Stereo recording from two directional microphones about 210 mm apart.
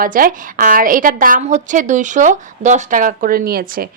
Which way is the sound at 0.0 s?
40° right (ahead or behind).